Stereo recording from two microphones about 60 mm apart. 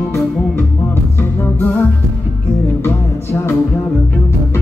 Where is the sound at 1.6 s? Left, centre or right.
Left.